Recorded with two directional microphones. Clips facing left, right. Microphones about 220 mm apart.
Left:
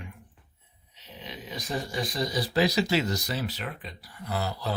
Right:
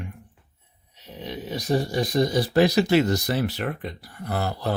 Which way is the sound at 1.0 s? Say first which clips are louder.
Right 8 dB; 55° right (ahead or behind).